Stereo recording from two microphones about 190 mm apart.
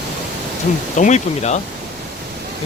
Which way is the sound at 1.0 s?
40° left (ahead or behind).